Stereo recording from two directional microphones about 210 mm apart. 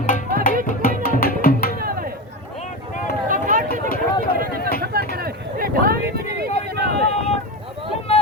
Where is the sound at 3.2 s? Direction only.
40° right (ahead or behind).